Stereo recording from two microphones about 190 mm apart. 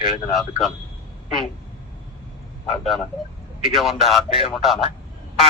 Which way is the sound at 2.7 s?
Centre (ahead or behind).